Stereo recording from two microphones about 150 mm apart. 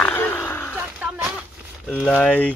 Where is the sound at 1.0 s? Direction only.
5° right (ahead or behind).